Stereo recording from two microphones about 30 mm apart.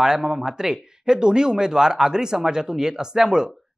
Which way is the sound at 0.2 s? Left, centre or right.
Centre.